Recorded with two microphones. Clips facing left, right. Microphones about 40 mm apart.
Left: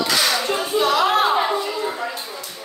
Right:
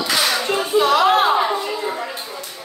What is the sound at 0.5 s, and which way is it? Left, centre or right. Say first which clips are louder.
Clapping: right 3 dB; right.